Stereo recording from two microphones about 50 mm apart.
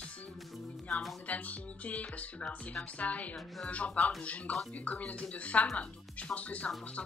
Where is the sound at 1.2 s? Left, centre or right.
Left.